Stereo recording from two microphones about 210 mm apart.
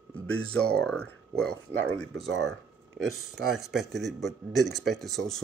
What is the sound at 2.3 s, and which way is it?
Speech, 60° right (ahead or behind).